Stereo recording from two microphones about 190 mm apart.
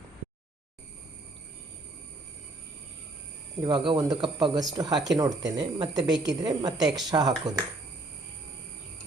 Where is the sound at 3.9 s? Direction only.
20° right (ahead or behind).